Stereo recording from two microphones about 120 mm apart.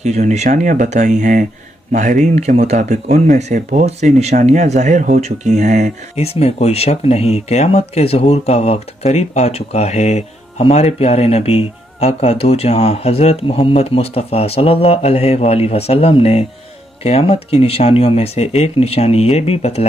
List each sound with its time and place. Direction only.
0.0 s speech: 70° right (ahead or behind)
6.1 s speech: 60° left (ahead or behind)